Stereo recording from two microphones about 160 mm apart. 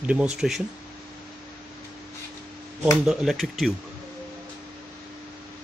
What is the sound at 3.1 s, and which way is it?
Speech, centre (ahead or behind).